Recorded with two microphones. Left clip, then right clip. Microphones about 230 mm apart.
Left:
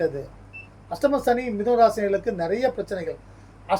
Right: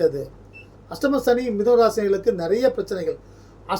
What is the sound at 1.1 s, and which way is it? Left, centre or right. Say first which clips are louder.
Speech: right 4 dB; centre.